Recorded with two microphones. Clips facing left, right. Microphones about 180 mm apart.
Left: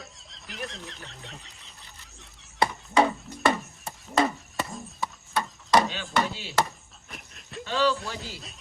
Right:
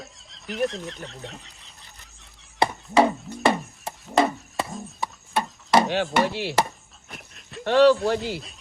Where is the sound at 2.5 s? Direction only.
25° right (ahead or behind).